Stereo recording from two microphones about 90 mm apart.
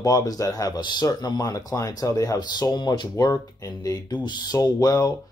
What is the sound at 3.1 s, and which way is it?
Speech, 35° left (ahead or behind).